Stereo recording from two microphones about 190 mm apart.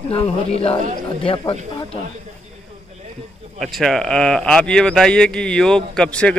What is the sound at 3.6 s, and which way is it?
A man's voice, centre (ahead or behind).